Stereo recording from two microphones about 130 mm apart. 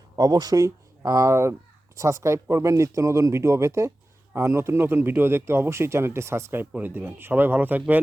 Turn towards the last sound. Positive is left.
turn(degrees=-15)  # may be behind; listen again after turning